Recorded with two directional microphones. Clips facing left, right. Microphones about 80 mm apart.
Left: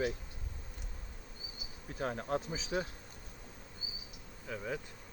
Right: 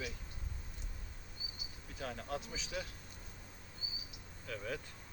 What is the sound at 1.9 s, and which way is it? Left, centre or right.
Speech, left.